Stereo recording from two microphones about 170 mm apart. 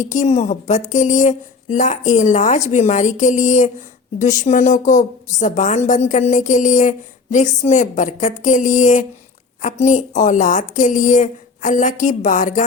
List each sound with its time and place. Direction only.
0.0 s a woman's voice: 45° left (ahead or behind)